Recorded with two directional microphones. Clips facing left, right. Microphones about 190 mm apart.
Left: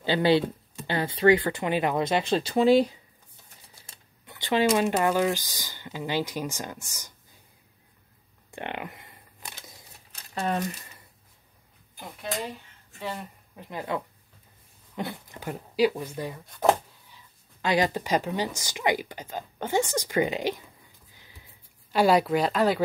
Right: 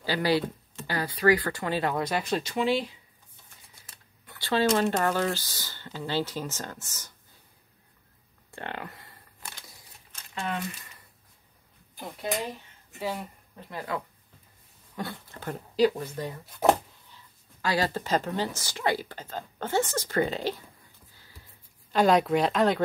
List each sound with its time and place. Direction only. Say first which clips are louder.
0.0 s speech: left 4 dB; 25° left (ahead or behind); by 3.0 s 40° left (ahead or behind)
3.8 s a sound: left 2 dB; 25° left (ahead or behind)
4.8 s speech: left 2 dB; 10° left (ahead or behind)
8.5 s a sound: left 2 dB; 15° left (ahead or behind)
10.1 s speech: left 5 dB; 40° left (ahead or behind)
13.0 s speech: right 2 dB; 5° right (ahead or behind)
13.6 s speech: left 2 dB; 20° left (ahead or behind)
16.4 s speech: even; 5° right (ahead or behind)
17.1 s speech: even; 20° left (ahead or behind)
21.1 s a sound: left 2 dB; 20° left (ahead or behind)
21.9 s speech: left 1 dB; 5° left (ahead or behind)